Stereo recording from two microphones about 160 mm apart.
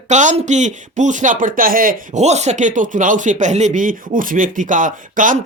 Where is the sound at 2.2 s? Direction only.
45° right (ahead or behind).